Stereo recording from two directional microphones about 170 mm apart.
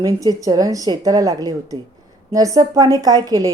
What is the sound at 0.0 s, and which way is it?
A woman's voice, 20° right (ahead or behind).